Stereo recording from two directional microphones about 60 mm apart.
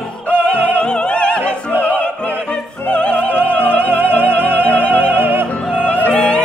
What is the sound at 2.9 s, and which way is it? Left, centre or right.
Music, centre.